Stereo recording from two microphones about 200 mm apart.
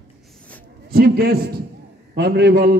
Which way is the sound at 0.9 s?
50° right (ahead or behind).